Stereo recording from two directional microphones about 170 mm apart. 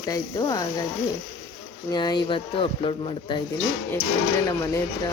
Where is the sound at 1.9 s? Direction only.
25° left (ahead or behind).